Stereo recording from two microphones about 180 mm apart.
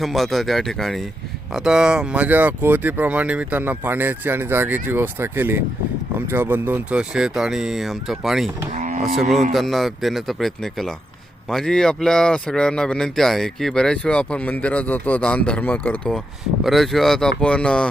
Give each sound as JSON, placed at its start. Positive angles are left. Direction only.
{"t": 0.0, "sound": "speech", "side_deg": 0}
{"t": 8.7, "sound": "cattle", "side_deg": -40}
{"t": 9.3, "sound": "speech", "side_deg": 0}